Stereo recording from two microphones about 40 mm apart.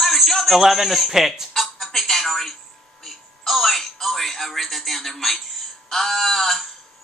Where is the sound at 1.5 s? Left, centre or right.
Centre.